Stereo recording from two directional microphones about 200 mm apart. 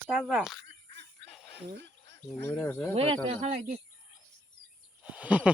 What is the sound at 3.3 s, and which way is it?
Speech, 30° right (ahead or behind).